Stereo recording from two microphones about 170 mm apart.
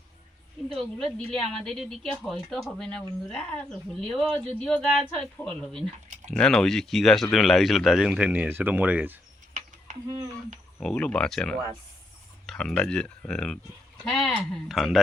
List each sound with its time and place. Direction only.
0.8 s speech: centre (ahead or behind)
9.6 s a sound: 45° right (ahead or behind)
10.8 s speech: 5° left (ahead or behind)